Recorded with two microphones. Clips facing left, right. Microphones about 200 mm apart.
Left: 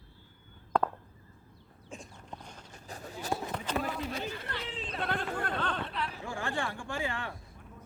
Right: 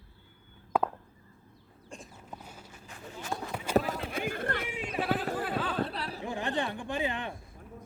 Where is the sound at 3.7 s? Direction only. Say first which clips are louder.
Right 7 dB; 50° right (ahead or behind).